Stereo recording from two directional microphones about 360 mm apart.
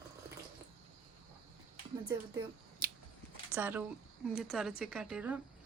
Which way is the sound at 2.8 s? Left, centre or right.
Right.